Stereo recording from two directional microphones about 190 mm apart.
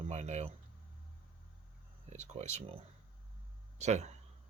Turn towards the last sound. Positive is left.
turn(degrees=-35)  # may be behind; listen again after turning